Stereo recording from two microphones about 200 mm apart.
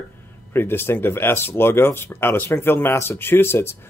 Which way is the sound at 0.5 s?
10° left (ahead or behind).